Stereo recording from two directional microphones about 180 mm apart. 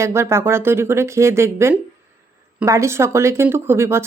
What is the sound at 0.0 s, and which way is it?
Speech, 15° right (ahead or behind).